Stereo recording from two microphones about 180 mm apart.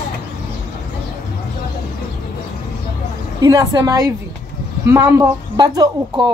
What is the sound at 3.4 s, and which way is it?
Speech, 20° right (ahead or behind).